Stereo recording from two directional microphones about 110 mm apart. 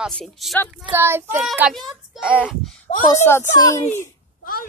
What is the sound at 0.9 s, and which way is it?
Child singing, 20° right (ahead or behind).